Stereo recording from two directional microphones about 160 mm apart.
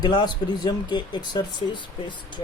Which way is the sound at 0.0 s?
30° left (ahead or behind).